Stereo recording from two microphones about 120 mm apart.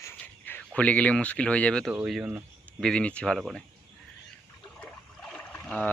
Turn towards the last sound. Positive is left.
turn(degrees=5)  # may be behind; listen again after turning